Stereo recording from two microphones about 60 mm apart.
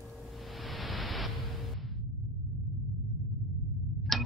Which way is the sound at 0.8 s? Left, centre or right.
Centre.